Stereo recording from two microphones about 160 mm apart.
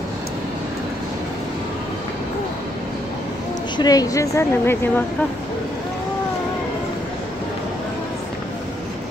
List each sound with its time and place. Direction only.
3.7 s a woman's voice: 25° left (ahead or behind)